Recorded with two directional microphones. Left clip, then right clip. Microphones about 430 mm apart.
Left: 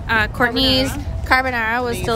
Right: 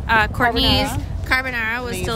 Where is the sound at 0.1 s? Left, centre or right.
Centre.